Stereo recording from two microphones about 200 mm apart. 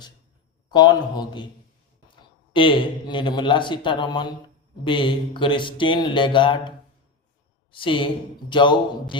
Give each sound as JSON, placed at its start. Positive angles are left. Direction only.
{"t": 0.7, "sound": "speech", "side_deg": 20}
{"t": 2.5, "sound": "speech", "side_deg": 25}